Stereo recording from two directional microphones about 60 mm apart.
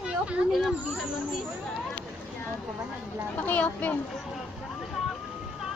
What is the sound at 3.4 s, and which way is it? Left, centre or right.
Speech, left.